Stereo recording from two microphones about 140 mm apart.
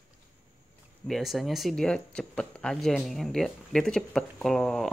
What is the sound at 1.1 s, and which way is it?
Speech, centre (ahead or behind).